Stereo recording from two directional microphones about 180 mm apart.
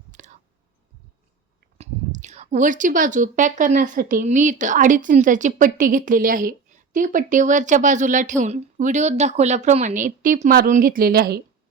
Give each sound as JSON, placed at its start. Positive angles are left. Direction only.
{"t": 0.1, "sound": "whispering", "side_deg": -40}
{"t": 1.8, "sound": "speech", "side_deg": -40}